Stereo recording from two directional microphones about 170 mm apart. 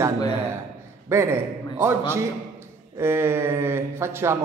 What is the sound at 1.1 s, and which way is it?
Speech, 15° right (ahead or behind).